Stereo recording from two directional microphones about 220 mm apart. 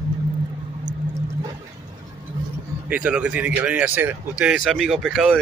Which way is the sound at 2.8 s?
5° right (ahead or behind).